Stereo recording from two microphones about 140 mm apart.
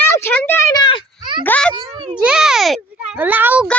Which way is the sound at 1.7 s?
35° right (ahead or behind).